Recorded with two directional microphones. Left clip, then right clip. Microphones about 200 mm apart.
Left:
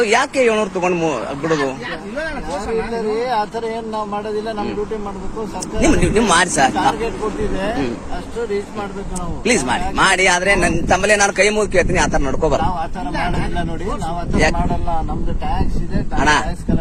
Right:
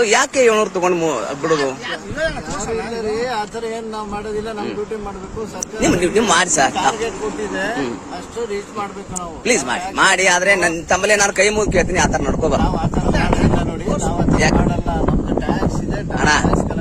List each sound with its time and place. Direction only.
0.0 s a man's voice: 20° right (ahead or behind)
5.8 s a man's voice: 15° right (ahead or behind)
9.4 s a man's voice: 10° right (ahead or behind)
14.3 s a man's voice: 10° right (ahead or behind)
15.9 s a man's voice: 10° right (ahead or behind)